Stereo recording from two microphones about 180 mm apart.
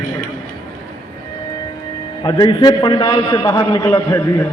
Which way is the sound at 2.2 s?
25° left (ahead or behind).